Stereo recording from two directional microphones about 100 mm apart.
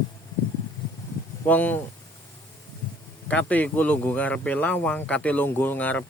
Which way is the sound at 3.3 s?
15° left (ahead or behind).